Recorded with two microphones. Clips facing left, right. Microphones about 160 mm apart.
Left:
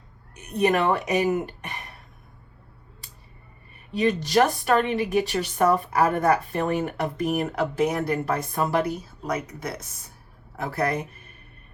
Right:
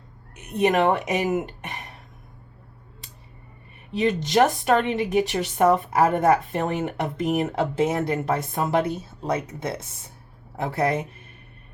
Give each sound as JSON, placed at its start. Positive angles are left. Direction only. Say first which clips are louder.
{"t": 0.7, "sound": "speech", "louder": "right 3 dB", "side_deg": -20}
{"t": 3.9, "sound": "speech", "louder": "right 1 dB", "side_deg": -20}